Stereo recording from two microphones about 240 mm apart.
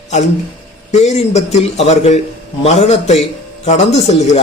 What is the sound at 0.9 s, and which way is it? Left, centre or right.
Speech, left.